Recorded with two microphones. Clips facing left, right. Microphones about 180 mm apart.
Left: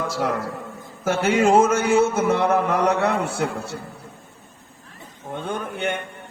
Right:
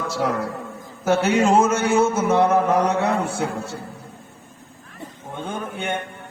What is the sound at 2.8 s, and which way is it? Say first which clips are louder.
Mantra: even; 65° left (ahead or behind).